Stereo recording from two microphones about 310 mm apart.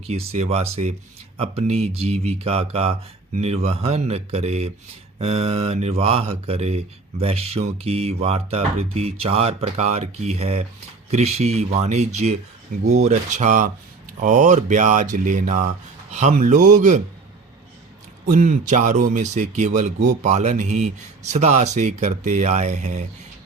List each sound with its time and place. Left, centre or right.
0.1 s mantra: centre
18.3 s mantra: right